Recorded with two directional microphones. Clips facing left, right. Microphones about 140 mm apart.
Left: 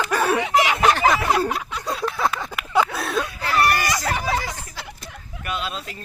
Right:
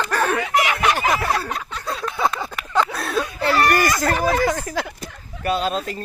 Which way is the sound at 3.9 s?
50° right (ahead or behind).